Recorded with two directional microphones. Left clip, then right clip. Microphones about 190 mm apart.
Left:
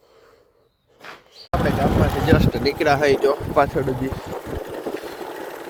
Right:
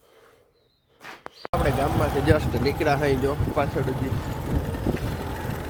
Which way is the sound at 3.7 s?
25° left (ahead or behind).